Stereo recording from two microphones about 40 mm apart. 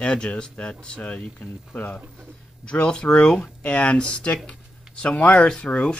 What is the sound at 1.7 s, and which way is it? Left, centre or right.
Speech, left.